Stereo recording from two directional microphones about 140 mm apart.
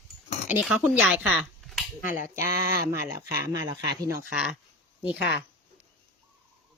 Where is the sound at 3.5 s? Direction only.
25° right (ahead or behind).